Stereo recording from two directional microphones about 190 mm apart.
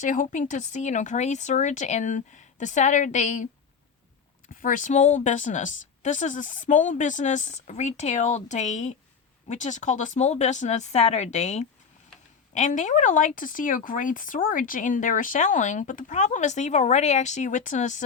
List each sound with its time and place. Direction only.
0.0 s speech: 40° left (ahead or behind)